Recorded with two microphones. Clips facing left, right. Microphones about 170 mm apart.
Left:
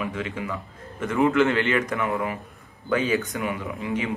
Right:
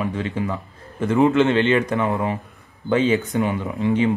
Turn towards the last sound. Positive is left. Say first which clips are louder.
# right 8 dB
turn(degrees=-30)  # may be behind; listen again after turning